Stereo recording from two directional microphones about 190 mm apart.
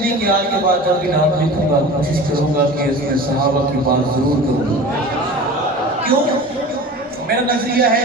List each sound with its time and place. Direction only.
7.3 s a man's voice: 50° right (ahead or behind)